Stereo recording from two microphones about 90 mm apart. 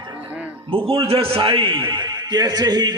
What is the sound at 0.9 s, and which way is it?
A man's voice, 90° right.